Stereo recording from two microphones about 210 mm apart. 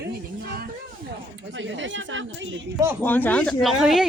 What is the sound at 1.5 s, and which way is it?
Speech, 60° right (ahead or behind).